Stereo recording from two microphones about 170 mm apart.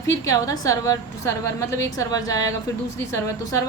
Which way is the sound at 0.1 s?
20° left (ahead or behind).